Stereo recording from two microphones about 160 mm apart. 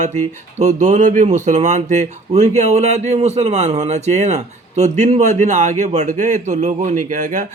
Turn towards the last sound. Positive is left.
turn(degrees=-50)  # may be behind; listen again after turning